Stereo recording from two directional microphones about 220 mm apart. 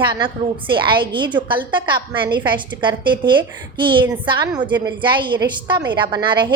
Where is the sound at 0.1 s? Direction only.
20° right (ahead or behind).